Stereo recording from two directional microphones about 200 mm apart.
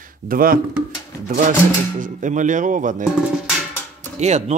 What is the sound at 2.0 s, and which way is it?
A man's voice, 40° right (ahead or behind).